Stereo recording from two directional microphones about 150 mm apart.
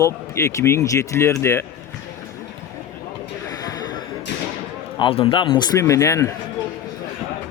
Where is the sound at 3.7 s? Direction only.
25° left (ahead or behind).